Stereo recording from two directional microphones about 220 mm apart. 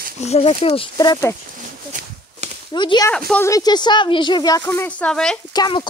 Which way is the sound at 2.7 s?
20° left (ahead or behind).